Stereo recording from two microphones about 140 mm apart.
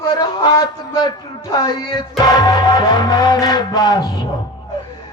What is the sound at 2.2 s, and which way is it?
Music, 30° left (ahead or behind).